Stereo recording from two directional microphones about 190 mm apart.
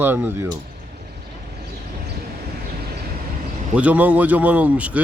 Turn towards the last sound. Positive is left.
turn(degrees=-5)  # may be behind; listen again after turning